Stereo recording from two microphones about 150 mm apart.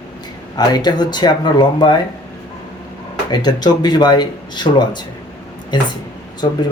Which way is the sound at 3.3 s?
30° left (ahead or behind).